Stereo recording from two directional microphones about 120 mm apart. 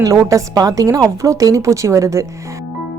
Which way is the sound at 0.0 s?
25° right (ahead or behind).